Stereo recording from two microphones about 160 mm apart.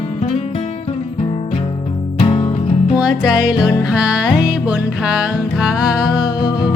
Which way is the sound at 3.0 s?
5° right (ahead or behind).